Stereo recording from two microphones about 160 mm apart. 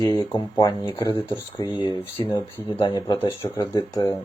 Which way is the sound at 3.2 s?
15° left (ahead or behind).